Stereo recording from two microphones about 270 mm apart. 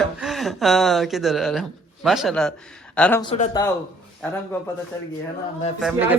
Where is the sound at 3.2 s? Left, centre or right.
Left.